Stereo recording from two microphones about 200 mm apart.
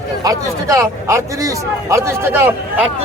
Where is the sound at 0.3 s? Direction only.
15° right (ahead or behind).